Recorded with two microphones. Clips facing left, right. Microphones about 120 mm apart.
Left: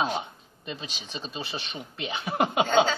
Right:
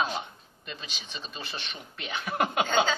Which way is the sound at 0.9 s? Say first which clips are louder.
Left 4 dB; 35° left (ahead or behind).